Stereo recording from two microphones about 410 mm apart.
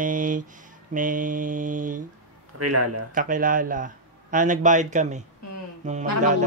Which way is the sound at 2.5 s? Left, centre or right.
Right.